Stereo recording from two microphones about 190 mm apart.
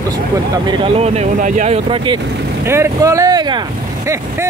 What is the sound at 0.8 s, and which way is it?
Speech, 35° right (ahead or behind).